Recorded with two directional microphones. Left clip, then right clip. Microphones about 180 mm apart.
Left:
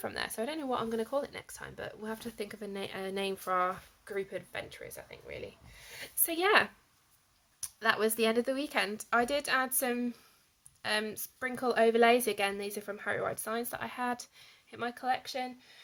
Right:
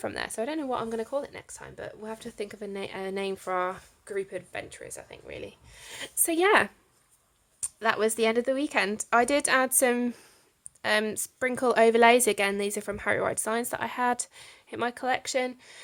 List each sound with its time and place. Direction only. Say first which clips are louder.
0.0 s speech: right 4 dB; 25° right (ahead or behind)
7.8 s a woman's voice: right 4 dB; 30° right (ahead or behind); by 15.8 s 45° right (ahead or behind)